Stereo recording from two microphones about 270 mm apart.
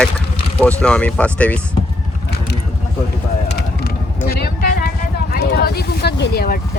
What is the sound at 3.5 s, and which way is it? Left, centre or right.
Vehicle, left.